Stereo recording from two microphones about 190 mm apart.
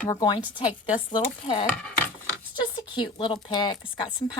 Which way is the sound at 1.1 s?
25° left (ahead or behind).